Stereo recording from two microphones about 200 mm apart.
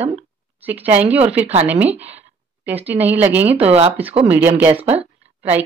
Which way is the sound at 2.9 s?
10° right (ahead or behind).